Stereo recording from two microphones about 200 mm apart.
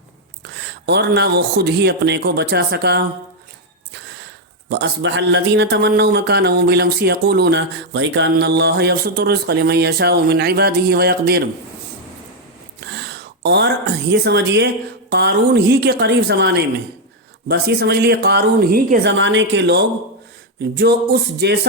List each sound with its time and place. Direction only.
0.5 s speech: 55° right (ahead or behind)
4.7 s a man's voice: 60° right (ahead or behind)
12.8 s a sound: 55° right (ahead or behind)
13.4 s a man's voice: 55° right (ahead or behind)
19.1 s speech: 65° right (ahead or behind)